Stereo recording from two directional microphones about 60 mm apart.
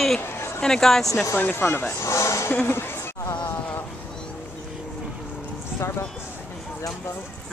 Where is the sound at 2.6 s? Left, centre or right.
Left.